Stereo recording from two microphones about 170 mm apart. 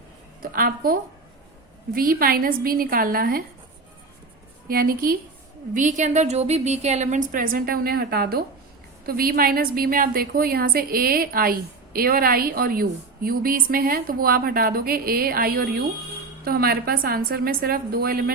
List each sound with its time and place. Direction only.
0.4 s a woman's voice: 55° right (ahead or behind)
4.7 s a woman's voice: 60° right (ahead or behind)
5.7 s a woman's voice: 45° right (ahead or behind); by 18.3 s 60° right (ahead or behind)